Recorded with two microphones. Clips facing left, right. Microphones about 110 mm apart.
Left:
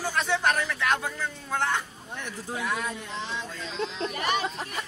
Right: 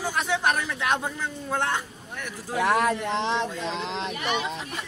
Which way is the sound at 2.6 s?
70° right (ahead or behind).